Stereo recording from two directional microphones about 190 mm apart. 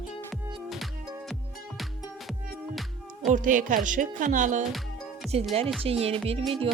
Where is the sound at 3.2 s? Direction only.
45° right (ahead or behind).